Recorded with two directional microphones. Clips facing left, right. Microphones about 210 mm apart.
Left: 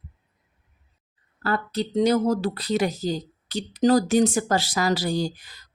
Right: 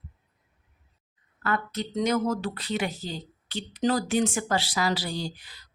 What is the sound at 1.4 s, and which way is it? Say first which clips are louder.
Speech: left 4 dB; 35° left (ahead or behind).